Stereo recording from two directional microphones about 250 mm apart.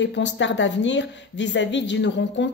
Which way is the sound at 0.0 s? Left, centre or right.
Left.